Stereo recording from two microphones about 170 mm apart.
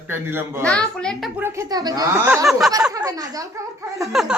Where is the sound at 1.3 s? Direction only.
15° right (ahead or behind).